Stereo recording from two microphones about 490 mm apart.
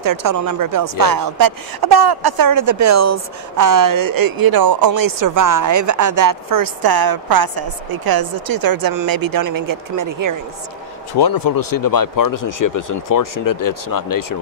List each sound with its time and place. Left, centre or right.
0.0 s speech: right
11.1 s speech: left